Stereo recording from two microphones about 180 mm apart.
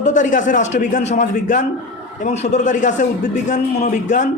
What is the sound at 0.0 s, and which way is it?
A man's voice, 45° left (ahead or behind).